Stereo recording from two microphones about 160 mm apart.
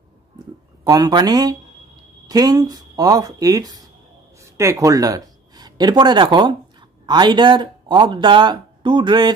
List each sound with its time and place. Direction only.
0.8 s speech: 25° right (ahead or behind)